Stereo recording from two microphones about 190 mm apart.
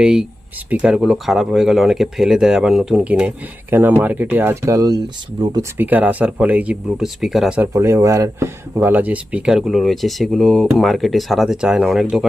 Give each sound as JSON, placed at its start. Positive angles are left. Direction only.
{"t": 0.0, "sound": "speech", "side_deg": -5}
{"t": 5.7, "sound": "speech", "side_deg": -10}